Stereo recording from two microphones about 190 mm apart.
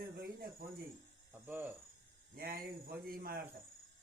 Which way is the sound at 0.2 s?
50° right (ahead or behind).